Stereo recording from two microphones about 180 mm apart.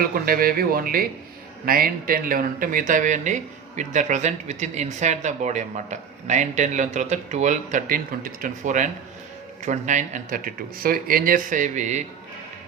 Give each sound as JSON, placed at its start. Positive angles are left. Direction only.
{"t": 0.0, "sound": "speech", "side_deg": -55}